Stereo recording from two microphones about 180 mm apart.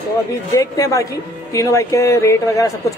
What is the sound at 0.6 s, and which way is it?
Speech, 20° left (ahead or behind).